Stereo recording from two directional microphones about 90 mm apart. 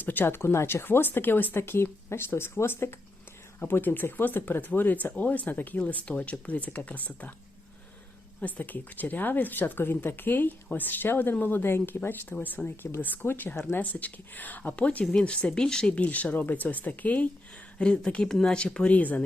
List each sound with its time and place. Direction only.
0.0 s speech: 20° left (ahead or behind)
8.4 s speech: 20° left (ahead or behind)